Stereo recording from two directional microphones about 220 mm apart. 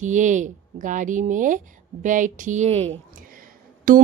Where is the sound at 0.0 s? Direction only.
35° right (ahead or behind).